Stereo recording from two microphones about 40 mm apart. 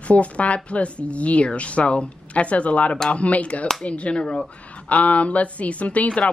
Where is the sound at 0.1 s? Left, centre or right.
Left.